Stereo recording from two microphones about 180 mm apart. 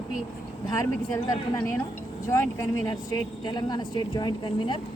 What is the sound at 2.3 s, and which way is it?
Speech, 15° left (ahead or behind).